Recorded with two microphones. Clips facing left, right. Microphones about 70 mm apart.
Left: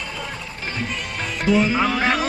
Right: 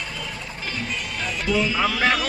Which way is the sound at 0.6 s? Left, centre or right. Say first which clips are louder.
Left 2 dB; left.